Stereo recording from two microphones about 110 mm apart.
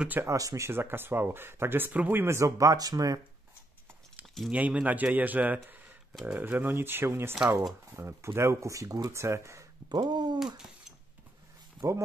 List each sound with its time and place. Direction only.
0.0 s speech: 15° right (ahead or behind)
0.3 s speech: 30° right (ahead or behind)
4.5 s speech: 10° right (ahead or behind); by 9.7 s 25° right (ahead or behind)
9.8 s speech: 40° right (ahead or behind)